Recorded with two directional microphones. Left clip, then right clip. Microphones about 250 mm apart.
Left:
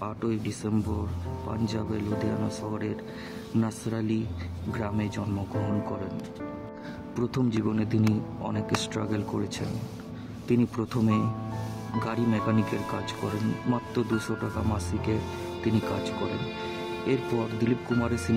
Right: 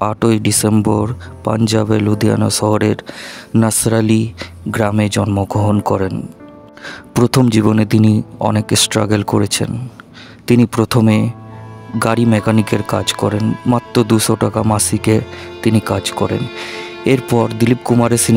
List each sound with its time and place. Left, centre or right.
0.0 s speech: right
7.2 s speech: right
16.3 s speech: centre
17.0 s speech: right